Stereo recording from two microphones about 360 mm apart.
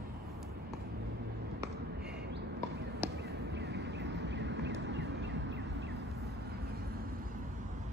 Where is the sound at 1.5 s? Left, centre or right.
Centre.